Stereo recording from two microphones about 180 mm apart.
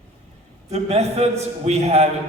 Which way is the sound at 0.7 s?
35° right (ahead or behind).